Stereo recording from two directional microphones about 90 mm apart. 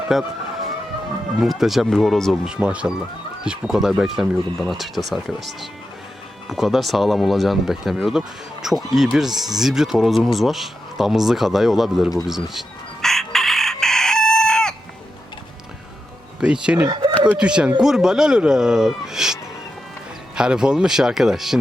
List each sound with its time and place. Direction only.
0.1 s speech: centre (ahead or behind)
1.4 s speech: 5° right (ahead or behind)
2.4 s speech: 10° right (ahead or behind)
10.3 s a sound: centre (ahead or behind)
16.4 s speech: 10° right (ahead or behind)
16.9 s a sound: 60° right (ahead or behind)
17.3 s speech: 10° right (ahead or behind)